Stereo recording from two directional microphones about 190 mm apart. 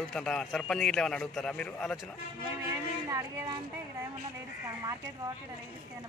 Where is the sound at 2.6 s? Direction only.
15° right (ahead or behind).